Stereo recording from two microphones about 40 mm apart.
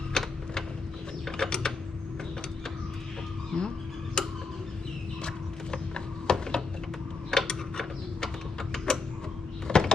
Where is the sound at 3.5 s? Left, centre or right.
Left.